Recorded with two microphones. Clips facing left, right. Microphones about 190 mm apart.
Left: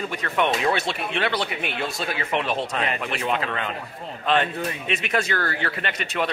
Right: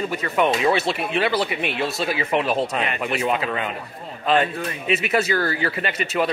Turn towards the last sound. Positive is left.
turn(degrees=-5)  # may be behind; listen again after turning